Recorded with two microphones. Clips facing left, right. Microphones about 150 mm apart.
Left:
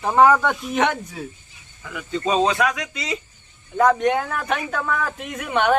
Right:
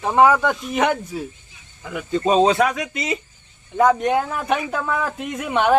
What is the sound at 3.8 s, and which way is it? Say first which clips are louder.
Speech: right 1 dB; 5° right (ahead or behind).